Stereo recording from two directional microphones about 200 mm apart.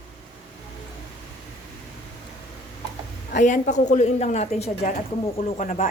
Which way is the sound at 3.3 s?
40° left (ahead or behind).